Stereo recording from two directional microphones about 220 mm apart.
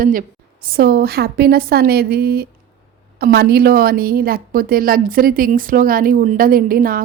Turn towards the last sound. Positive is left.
turn(degrees=-40)  # may be behind; listen again after turning